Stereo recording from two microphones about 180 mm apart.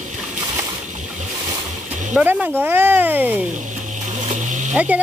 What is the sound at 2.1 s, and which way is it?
Speech, 10° right (ahead or behind).